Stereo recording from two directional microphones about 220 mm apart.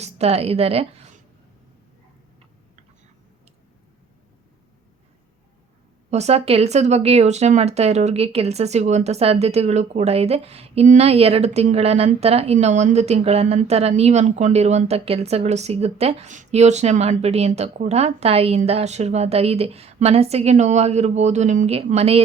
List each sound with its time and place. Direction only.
0.0 s a woman's voice: 30° right (ahead or behind)
6.1 s speech: 30° right (ahead or behind)